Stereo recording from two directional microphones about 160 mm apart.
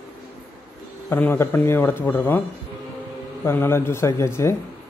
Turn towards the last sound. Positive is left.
turn(degrees=15)  # may be behind; listen again after turning